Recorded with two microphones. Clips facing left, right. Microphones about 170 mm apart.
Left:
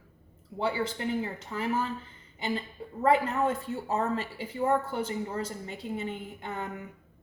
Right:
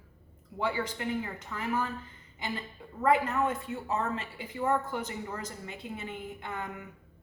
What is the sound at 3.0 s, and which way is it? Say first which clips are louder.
A woman's voice: left 2 dB; 30° left (ahead or behind).